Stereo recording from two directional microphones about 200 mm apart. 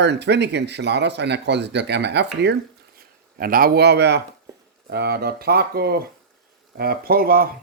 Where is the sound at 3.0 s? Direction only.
45° right (ahead or behind).